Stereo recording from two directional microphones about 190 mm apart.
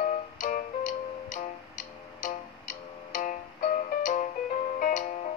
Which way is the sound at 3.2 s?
45° left (ahead or behind).